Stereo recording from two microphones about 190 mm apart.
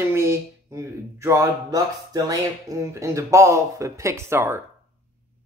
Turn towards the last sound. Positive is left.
turn(degrees=-15)  # may be behind; listen again after turning